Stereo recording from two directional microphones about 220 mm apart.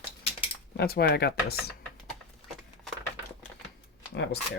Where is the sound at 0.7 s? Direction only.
45° left (ahead or behind).